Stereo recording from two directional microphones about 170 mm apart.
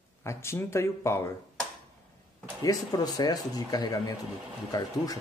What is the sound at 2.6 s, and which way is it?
Speech, 20° left (ahead or behind).